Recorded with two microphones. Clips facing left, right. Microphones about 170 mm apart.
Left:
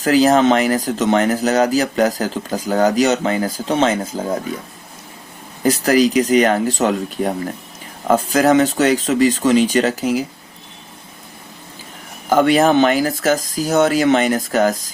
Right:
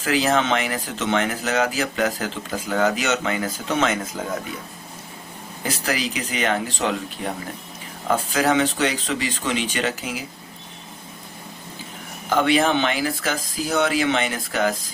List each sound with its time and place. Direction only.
0.0 s speech: 40° left (ahead or behind)
5.6 s speech: 40° left (ahead or behind)
12.3 s speech: 45° left (ahead or behind)